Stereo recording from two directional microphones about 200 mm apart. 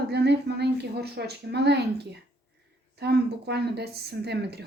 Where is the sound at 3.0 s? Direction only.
55° right (ahead or behind).